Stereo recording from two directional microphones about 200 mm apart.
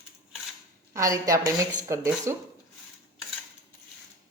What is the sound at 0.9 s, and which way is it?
Speech, 15° right (ahead or behind).